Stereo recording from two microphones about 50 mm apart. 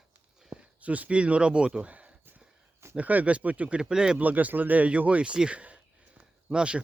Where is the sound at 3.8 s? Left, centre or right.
Centre.